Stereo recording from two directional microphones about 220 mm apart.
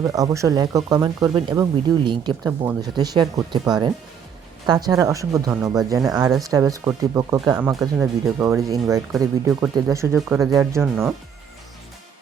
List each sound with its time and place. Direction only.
0.0 s speech: 15° right (ahead or behind)
9.1 s speech: 5° right (ahead or behind)
10.2 s speech: centre (ahead or behind)
10.5 s speech: 10° right (ahead or behind)